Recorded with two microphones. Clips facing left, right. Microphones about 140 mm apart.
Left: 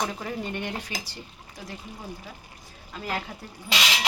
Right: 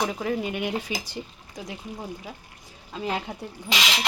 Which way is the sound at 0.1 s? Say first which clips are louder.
Right 5 dB; 5° right (ahead or behind).